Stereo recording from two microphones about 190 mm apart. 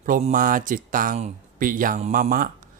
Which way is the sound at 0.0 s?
45° right (ahead or behind).